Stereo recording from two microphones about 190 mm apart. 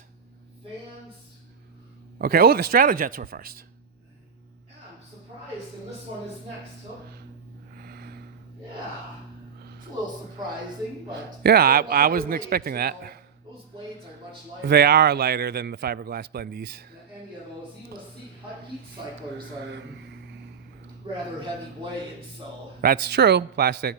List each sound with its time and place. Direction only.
2.1 s a man's voice: 55° right (ahead or behind)
7.8 s snort: 55° right (ahead or behind)
11.1 s a man's voice: 55° right (ahead or behind)
14.7 s a man's voice: 55° right (ahead or behind)
21.0 s speech: 25° right (ahead or behind)
22.8 s a man's voice: 50° right (ahead or behind)